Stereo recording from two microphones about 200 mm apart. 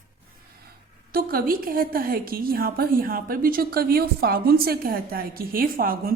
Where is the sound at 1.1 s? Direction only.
45° right (ahead or behind).